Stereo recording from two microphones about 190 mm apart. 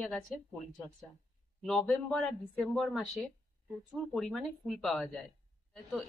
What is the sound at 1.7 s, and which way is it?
Speech, 5° left (ahead or behind).